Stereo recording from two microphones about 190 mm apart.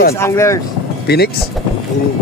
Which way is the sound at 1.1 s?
55° left (ahead or behind).